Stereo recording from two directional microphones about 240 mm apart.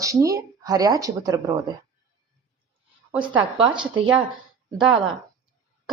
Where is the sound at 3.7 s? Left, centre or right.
Centre.